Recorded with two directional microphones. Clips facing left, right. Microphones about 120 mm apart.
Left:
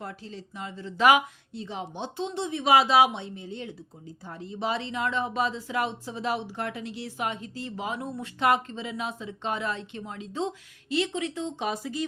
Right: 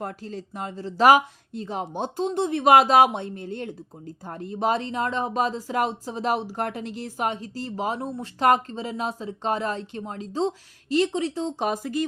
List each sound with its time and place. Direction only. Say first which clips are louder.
0.0 s speech: right 6 dB; 45° right (ahead or behind)
11.7 s speech: right 5 dB; 50° right (ahead or behind)